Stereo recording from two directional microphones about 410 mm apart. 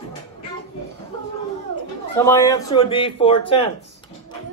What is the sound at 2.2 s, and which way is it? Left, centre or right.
A man's voice, centre.